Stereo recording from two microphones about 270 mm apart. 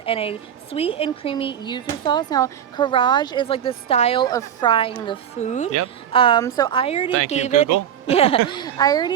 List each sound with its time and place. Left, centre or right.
0.0 s a woman's voice: left